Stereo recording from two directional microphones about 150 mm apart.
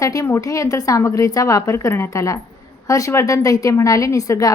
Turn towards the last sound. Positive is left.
turn(degrees=25)  # may be behind; listen again after turning